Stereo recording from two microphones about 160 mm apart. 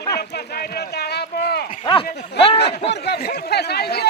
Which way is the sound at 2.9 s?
90° left.